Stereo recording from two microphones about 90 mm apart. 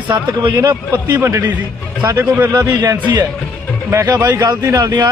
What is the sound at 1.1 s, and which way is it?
A man's voice, 30° right (ahead or behind).